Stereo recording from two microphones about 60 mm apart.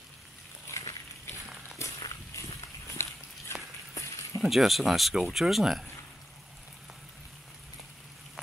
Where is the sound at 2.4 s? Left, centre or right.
Left.